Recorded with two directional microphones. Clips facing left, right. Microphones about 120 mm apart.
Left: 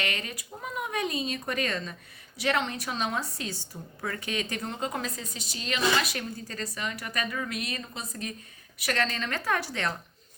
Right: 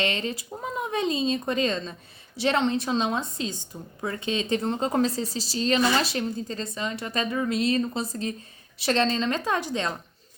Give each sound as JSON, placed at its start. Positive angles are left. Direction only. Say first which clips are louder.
{"t": 0.0, "sound": "speech", "louder": "right 6 dB", "side_deg": -25}